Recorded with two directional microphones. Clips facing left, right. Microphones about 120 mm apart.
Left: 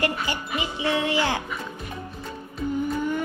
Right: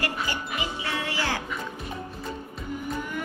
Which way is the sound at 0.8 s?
20° left (ahead or behind).